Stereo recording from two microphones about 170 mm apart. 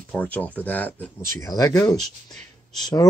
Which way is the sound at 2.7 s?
20° left (ahead or behind).